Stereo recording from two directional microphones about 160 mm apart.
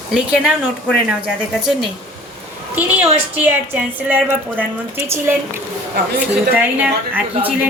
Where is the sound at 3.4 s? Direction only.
10° right (ahead or behind).